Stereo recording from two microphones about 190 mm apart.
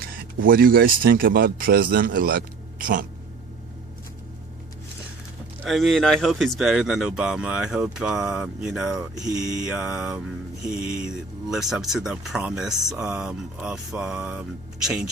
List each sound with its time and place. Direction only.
0.4 s a man's voice: 50° right (ahead or behind)
5.6 s speech: centre (ahead or behind)